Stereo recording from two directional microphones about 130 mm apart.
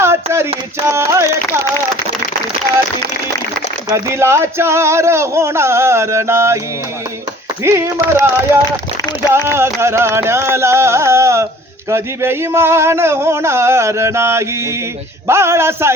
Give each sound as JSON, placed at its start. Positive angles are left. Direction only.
{"t": 0.0, "sound": "a sound", "side_deg": -20}
{"t": 0.9, "sound": "speech", "side_deg": -20}
{"t": 3.9, "sound": "speech", "side_deg": -20}
{"t": 7.6, "sound": "speech", "side_deg": -20}
{"t": 9.3, "sound": "speech", "side_deg": -20}